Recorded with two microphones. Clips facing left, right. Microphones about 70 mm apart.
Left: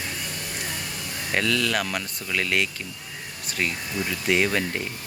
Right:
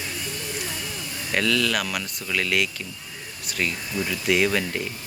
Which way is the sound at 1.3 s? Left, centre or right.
Left.